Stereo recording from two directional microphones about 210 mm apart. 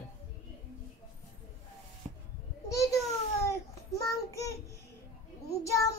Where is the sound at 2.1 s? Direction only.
25° right (ahead or behind).